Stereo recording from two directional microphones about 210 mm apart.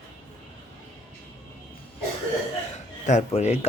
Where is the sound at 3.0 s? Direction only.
35° left (ahead or behind).